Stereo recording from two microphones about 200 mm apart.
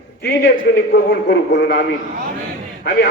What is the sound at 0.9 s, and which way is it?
Speech, 60° left (ahead or behind).